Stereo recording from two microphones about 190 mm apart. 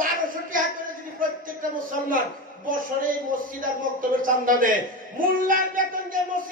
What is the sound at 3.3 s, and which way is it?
A man's voice, 45° right (ahead or behind).